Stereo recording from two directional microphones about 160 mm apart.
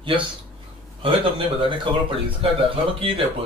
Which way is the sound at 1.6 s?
35° right (ahead or behind).